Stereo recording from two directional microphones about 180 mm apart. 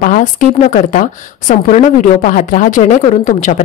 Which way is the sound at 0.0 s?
45° left (ahead or behind).